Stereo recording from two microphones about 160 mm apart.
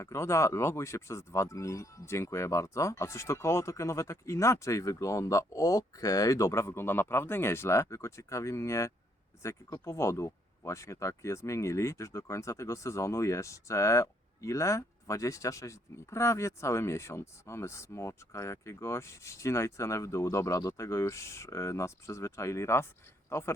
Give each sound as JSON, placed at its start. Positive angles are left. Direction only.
{"t": 0.0, "sound": "speech", "side_deg": 20}